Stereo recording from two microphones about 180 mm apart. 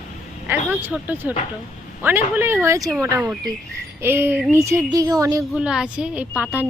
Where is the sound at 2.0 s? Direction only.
10° right (ahead or behind).